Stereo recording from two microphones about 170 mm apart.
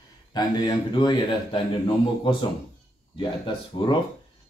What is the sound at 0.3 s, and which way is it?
Speech, 25° left (ahead or behind).